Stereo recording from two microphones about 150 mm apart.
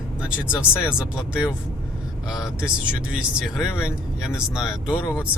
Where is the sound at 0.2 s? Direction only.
5° right (ahead or behind).